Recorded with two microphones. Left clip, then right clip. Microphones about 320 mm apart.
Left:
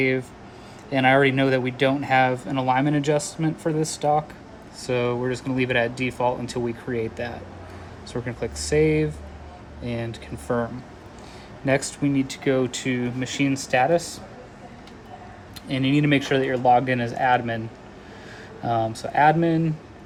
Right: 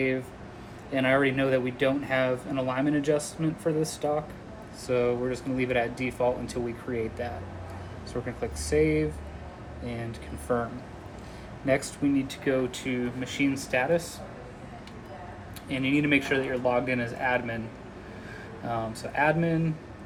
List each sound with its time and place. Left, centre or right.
0.9 s speech: left
11.6 s speech: left
15.8 s speech: left
18.7 s speech: left